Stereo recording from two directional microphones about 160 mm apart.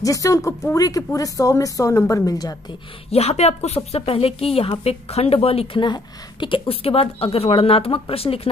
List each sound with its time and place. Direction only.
0.0 s speech: 20° left (ahead or behind)
3.1 s a woman's voice: 40° left (ahead or behind)